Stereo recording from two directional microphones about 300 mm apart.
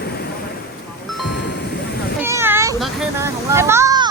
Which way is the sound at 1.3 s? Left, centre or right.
Left.